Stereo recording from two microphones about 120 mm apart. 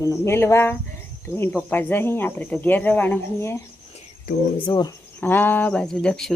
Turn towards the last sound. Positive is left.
turn(degrees=5)  # may be behind; listen again after turning